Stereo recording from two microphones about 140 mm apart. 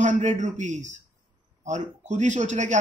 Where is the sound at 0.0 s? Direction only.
60° right (ahead or behind).